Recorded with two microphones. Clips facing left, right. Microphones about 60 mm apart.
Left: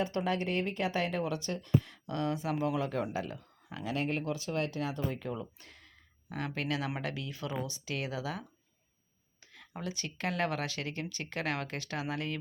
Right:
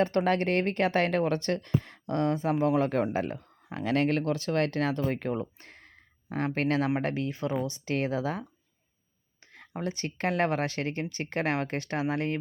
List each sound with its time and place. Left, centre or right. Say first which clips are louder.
0.0 s speech: right 7 dB; right
3.8 s speech: right 7 dB; right
9.4 s a sound: right 4 dB; right
9.8 s speech: right 6 dB; right